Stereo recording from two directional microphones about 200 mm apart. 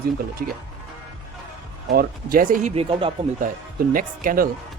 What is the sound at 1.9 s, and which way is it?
Speech, 45° right (ahead or behind).